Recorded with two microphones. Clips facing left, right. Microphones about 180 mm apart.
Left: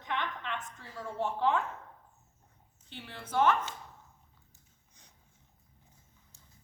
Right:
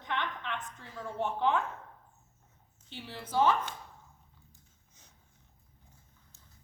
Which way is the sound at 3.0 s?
5° right (ahead or behind).